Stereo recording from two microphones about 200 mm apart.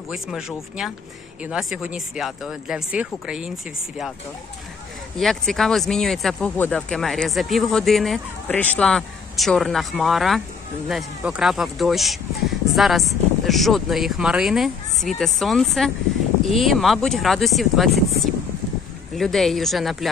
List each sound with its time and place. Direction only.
0.1 s speech: centre (ahead or behind)
5.1 s speech: centre (ahead or behind)